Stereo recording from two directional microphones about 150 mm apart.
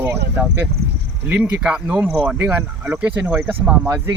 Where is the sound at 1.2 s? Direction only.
10° right (ahead or behind).